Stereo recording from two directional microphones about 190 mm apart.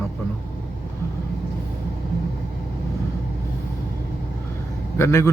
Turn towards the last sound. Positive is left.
turn(degrees=15)  # may be behind; listen again after turning